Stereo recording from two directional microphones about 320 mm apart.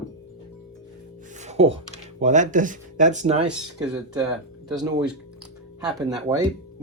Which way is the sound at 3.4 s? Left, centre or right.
Centre.